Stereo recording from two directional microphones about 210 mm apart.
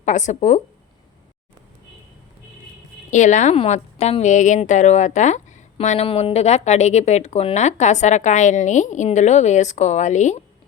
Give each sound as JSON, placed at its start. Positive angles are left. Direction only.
{"t": 0.0, "sound": "a woman's voice", "side_deg": 35}
{"t": 3.1, "sound": "a woman's voice", "side_deg": 35}